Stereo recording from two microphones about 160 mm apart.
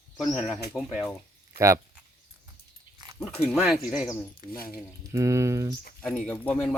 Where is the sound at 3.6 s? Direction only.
Centre (ahead or behind).